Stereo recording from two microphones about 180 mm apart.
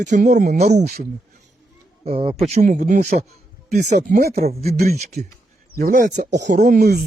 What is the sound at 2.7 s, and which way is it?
Speech, 50° right (ahead or behind).